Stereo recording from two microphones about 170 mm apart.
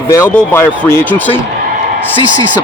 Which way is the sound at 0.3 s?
10° left (ahead or behind).